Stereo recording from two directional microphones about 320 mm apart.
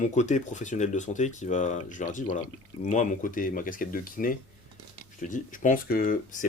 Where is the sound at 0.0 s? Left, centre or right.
Left.